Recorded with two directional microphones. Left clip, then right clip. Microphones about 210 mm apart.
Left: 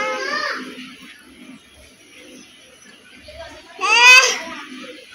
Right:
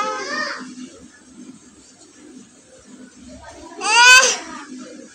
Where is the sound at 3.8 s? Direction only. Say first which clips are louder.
Left 1 dB; 40° right (ahead or behind).